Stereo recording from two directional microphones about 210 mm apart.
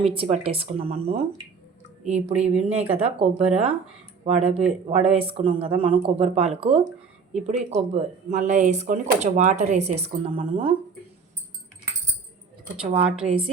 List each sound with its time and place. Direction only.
0.0 s speech: 25° right (ahead or behind)
13.2 s speech: 25° right (ahead or behind)